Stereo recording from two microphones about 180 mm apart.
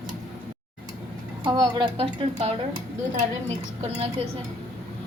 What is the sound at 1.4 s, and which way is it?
A woman's voice, 25° right (ahead or behind).